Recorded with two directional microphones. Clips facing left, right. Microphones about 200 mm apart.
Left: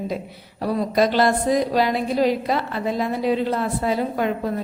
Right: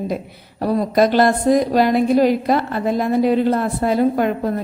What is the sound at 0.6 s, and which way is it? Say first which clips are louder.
A woman's voice: right 4 dB; 50° right (ahead or behind).